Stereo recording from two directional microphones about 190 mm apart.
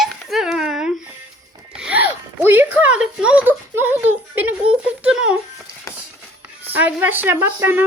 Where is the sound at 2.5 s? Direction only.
10° right (ahead or behind).